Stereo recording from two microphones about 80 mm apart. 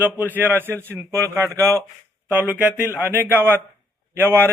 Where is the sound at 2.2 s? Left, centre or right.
Centre.